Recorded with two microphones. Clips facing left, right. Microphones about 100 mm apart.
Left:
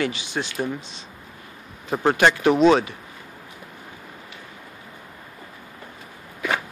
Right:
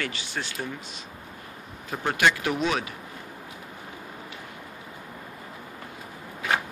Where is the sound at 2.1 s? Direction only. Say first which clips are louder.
Left 6 dB; 30° left (ahead or behind).